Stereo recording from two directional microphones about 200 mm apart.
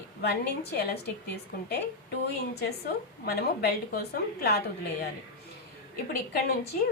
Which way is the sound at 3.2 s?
50° left (ahead or behind).